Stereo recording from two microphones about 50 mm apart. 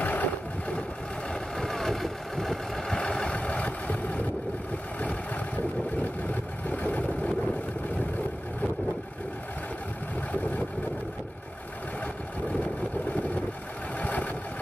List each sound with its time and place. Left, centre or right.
0.0 s vehicle: left
1.6 s vehicle: centre
3.0 s vehicle: centre
6.7 s vehicle: left
13.9 s vehicle: left